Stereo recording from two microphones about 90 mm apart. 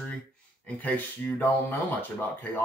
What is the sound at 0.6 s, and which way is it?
Speech, 15° left (ahead or behind).